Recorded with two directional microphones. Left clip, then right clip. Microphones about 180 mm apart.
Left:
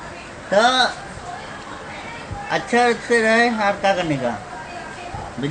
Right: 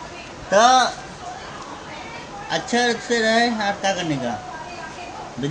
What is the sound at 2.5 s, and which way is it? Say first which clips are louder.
Speech: left 3 dB; 5° right (ahead or behind).